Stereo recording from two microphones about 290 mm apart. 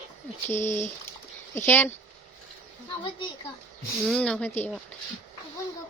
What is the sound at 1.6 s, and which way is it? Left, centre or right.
Speech, centre.